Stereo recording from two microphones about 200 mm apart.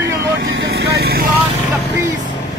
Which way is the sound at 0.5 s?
55° right (ahead or behind).